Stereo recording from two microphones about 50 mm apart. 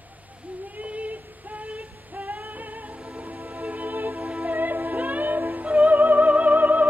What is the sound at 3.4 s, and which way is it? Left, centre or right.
Music, right.